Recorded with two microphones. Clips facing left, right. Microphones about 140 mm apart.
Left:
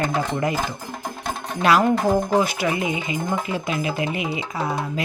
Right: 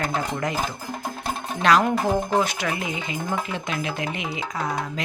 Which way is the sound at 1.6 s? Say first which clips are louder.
Left 2 dB; 5° left (ahead or behind).